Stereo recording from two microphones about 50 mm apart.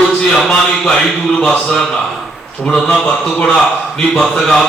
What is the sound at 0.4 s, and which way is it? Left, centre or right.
Speech, centre.